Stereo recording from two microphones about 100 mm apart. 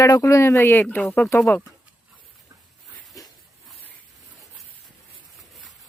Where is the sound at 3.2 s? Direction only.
35° left (ahead or behind).